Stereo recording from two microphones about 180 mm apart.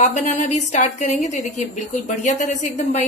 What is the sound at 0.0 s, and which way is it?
Speech, 40° left (ahead or behind).